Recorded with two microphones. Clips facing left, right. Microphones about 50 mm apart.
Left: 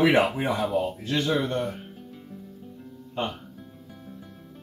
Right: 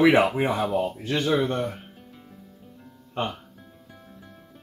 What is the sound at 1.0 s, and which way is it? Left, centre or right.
Speech, right.